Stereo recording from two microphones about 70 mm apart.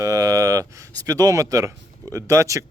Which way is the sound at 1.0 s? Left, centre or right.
Right.